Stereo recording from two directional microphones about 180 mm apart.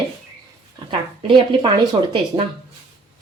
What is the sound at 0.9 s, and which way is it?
Speech, 25° right (ahead or behind).